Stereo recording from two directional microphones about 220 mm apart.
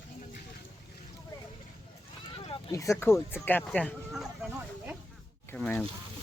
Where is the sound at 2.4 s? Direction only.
25° left (ahead or behind).